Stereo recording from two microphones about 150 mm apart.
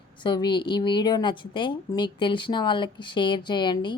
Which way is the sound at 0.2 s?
30° left (ahead or behind).